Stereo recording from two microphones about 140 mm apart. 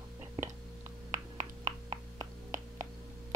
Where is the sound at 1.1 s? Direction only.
60° right (ahead or behind).